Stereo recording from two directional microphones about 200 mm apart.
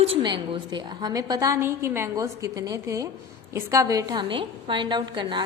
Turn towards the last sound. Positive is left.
turn(degrees=-20)  # may be behind; listen again after turning